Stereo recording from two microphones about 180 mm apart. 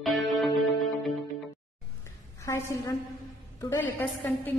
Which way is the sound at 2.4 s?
20° left (ahead or behind).